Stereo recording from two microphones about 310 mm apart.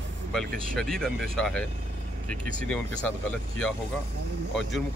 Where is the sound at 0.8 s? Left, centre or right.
Centre.